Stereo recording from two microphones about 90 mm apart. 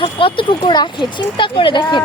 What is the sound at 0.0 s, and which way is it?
Speech, 75° left (ahead or behind).